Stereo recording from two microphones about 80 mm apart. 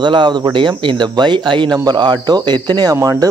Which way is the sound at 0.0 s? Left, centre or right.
Right.